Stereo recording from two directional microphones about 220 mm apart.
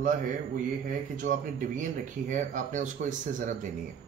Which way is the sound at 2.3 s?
35° right (ahead or behind).